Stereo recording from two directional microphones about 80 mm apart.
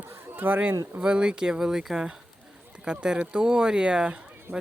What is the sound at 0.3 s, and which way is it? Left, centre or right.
Speech, right.